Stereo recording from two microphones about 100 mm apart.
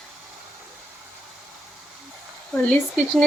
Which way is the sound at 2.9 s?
5° left (ahead or behind).